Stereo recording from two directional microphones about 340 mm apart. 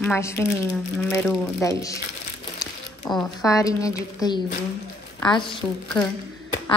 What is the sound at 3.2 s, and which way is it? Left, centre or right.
Speech, centre.